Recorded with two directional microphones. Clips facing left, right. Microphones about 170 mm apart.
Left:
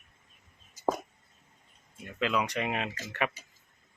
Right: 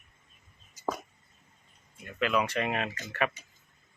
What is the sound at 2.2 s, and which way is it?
Speech, 20° left (ahead or behind).